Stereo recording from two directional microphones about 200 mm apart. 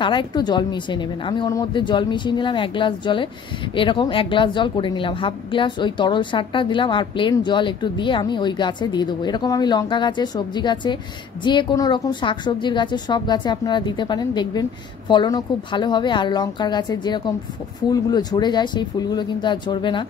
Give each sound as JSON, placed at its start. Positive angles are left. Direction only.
{"t": 0.0, "sound": "a woman's voice", "side_deg": 25}